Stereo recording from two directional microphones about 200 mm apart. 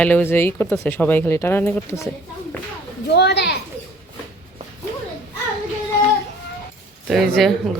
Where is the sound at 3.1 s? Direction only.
55° left (ahead or behind).